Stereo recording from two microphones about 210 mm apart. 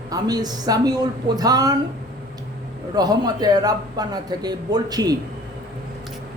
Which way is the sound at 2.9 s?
20° right (ahead or behind).